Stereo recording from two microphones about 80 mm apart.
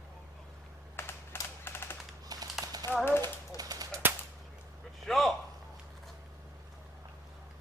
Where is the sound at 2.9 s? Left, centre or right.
Left.